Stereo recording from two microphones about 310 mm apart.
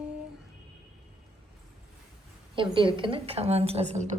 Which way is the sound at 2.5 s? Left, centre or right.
Centre.